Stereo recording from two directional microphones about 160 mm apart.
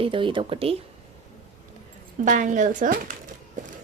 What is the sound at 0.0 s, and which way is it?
Speech, 30° right (ahead or behind).